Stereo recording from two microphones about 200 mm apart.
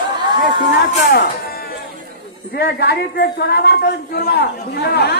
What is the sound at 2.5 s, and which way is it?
A man's voice, 55° left (ahead or behind).